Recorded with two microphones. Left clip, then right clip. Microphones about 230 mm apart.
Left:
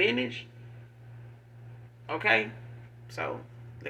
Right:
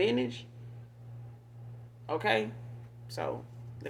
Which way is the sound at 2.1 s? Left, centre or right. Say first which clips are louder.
Left 4 dB; right.